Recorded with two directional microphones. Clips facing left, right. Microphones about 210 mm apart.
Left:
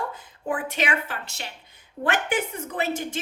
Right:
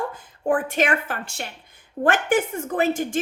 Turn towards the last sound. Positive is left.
turn(degrees=-45)  # may be behind; listen again after turning